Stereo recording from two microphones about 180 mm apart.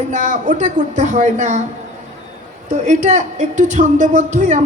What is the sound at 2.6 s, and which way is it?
A woman's voice, 45° right (ahead or behind).